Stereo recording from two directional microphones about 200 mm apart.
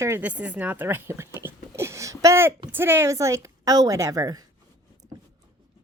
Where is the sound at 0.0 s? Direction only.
10° right (ahead or behind).